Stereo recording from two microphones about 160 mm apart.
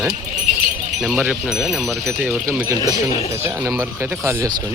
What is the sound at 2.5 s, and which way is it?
Speech, 20° right (ahead or behind).